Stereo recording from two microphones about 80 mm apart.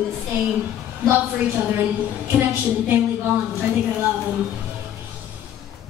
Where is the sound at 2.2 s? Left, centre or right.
Right.